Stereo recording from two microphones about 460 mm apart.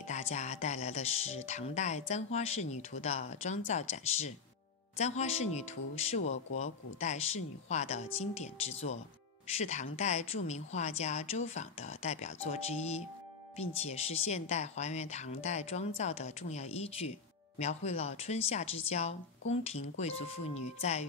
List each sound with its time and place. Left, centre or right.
0.0 s speech: centre